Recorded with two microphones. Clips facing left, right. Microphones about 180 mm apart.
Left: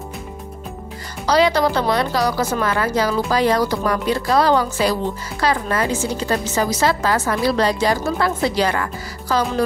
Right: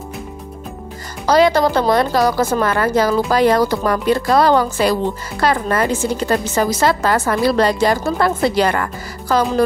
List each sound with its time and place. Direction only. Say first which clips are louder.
1.2 s speech: right 3 dB; 50° right (ahead or behind)